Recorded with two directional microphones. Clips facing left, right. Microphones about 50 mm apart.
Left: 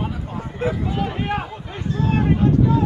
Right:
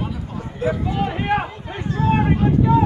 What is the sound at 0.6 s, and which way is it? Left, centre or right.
Speech, left.